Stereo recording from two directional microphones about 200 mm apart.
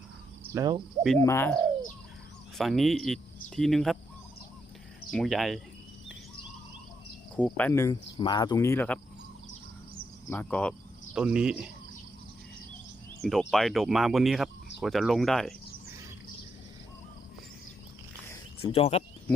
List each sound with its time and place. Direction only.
0.5 s insect: 20° right (ahead or behind)
1.2 s speech: 10° left (ahead or behind)
2.6 s speech: centre (ahead or behind)
5.1 s speech: centre (ahead or behind)
7.3 s speech: 5° left (ahead or behind)
10.2 s speech: 10° left (ahead or behind)
11.1 s speech: 5° right (ahead or behind)
13.2 s speech: centre (ahead or behind)
18.6 s speech: 30° left (ahead or behind)